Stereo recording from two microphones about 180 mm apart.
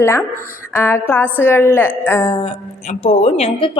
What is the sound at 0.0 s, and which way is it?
A woman's voice, 15° left (ahead or behind).